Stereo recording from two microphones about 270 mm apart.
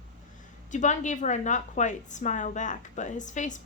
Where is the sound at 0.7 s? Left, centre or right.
Left.